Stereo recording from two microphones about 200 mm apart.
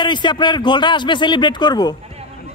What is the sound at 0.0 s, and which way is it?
Speech, 25° left (ahead or behind).